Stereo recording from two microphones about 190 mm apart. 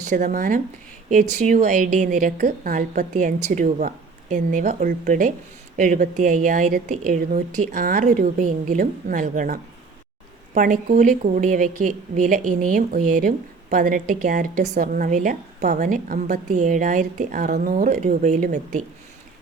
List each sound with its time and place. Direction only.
0.0 s a woman's voice: 40° right (ahead or behind)